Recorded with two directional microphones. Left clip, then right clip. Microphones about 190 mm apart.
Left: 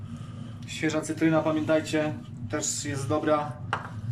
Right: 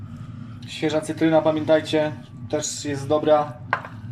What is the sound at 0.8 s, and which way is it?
Speech, 25° right (ahead or behind).